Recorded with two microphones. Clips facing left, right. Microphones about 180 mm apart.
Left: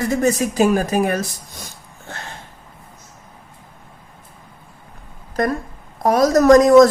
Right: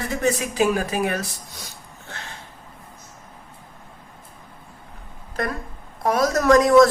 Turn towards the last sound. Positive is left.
turn(degrees=40)  # may be behind; listen again after turning